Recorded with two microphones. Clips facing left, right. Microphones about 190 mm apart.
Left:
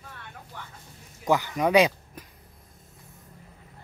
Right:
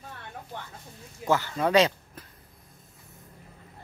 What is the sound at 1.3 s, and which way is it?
Speech, 15° left (ahead or behind).